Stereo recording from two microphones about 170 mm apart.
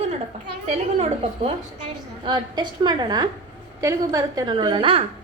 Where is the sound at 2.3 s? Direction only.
25° right (ahead or behind).